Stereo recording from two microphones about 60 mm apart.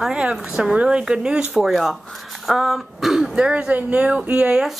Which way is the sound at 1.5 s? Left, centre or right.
Centre.